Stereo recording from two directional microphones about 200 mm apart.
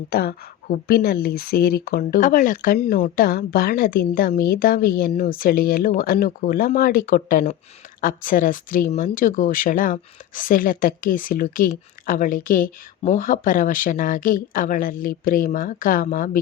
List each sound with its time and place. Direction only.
0.1 s speech: 50° left (ahead or behind)